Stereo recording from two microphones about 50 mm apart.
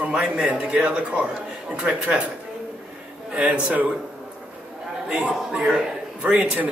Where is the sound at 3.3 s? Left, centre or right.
Right.